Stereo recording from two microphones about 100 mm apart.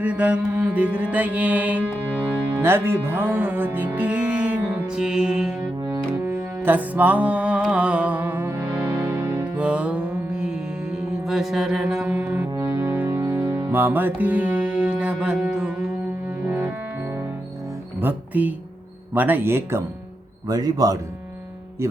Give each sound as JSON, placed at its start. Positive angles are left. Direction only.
{"t": 0.0, "sound": "music", "side_deg": -15}
{"t": 6.1, "sound": "music", "side_deg": -20}
{"t": 9.6, "sound": "mantra", "side_deg": -10}
{"t": 12.1, "sound": "music", "side_deg": -25}
{"t": 16.5, "sound": "music", "side_deg": -25}
{"t": 18.0, "sound": "speech", "side_deg": -20}
{"t": 20.5, "sound": "speech", "side_deg": -40}